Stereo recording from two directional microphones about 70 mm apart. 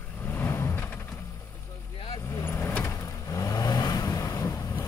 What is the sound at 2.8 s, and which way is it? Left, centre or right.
Vehicle, left.